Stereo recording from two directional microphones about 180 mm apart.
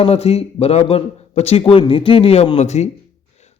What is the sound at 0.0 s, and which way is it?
A man's voice, 35° left (ahead or behind).